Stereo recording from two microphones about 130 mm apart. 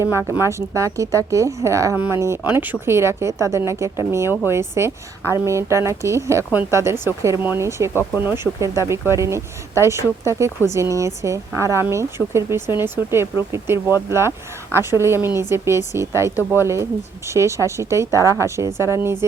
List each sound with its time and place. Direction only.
0.0 s speech: 20° right (ahead or behind)